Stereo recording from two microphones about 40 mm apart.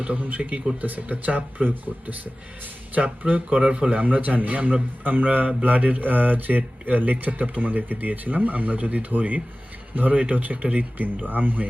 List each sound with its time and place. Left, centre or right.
0.2 s speech: right
3.5 s a man's voice: right
5.0 s speech: right